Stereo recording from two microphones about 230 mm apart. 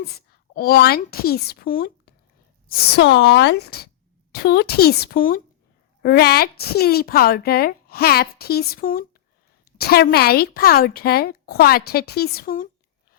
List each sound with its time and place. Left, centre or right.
0.0 s a woman's voice: left